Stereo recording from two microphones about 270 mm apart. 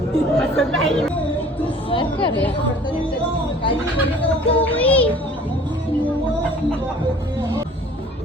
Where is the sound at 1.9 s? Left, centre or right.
Centre.